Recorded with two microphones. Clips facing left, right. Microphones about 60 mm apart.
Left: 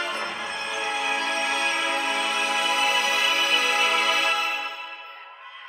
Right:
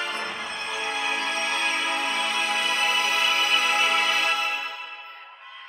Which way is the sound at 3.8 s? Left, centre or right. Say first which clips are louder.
Even; centre.